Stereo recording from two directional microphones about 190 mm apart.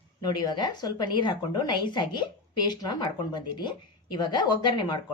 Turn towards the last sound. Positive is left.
turn(degrees=25)  # may be behind; listen again after turning